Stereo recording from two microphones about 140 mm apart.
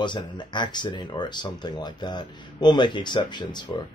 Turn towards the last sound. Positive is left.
turn(degrees=30)  # may be behind; listen again after turning